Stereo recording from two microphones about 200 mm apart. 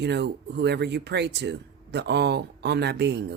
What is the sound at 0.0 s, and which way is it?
Speech, 60° right (ahead or behind).